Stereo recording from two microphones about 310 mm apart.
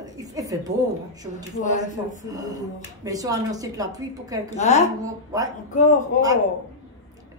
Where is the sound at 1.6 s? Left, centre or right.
Left.